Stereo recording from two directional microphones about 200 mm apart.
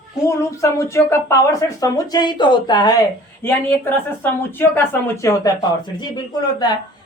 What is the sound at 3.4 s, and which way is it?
Speech, 10° left (ahead or behind).